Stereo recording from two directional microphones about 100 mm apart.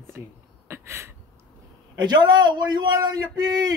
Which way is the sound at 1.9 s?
45° right (ahead or behind).